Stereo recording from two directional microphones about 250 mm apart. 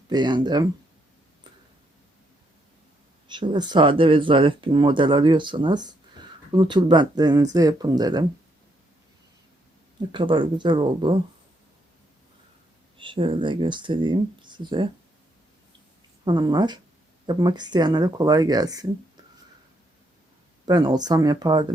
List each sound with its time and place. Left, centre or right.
0.1 s speech: centre
3.2 s speech: centre
10.1 s speech: centre
13.0 s speech: centre
16.2 s speech: centre
20.7 s speech: centre